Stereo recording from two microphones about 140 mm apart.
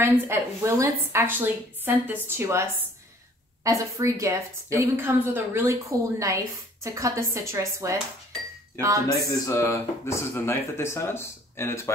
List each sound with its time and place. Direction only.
0.0 s a woman's voice: 15° right (ahead or behind)
9.1 s speech: 20° left (ahead or behind)